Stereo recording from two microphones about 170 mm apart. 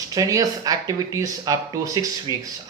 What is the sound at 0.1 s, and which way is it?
Speech, 20° right (ahead or behind).